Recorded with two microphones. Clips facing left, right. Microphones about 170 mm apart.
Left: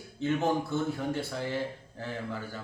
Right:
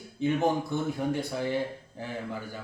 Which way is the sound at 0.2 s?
15° right (ahead or behind).